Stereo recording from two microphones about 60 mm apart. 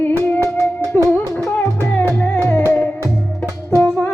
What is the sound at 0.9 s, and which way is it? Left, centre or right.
Music, left.